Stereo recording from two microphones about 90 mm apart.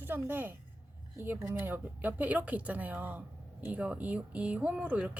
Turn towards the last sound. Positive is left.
turn(degrees=-15)  # may be behind; listen again after turning